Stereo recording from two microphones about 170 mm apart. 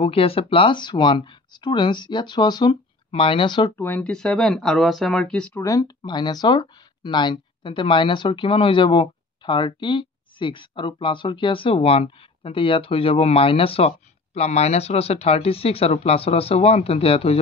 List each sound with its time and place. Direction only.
0.0 s speech: 35° left (ahead or behind)
3.7 s speech: 10° left (ahead or behind)
5.5 s speech: 20° left (ahead or behind)